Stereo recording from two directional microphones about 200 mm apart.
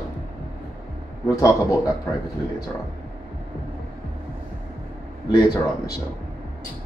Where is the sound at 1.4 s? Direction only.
15° left (ahead or behind).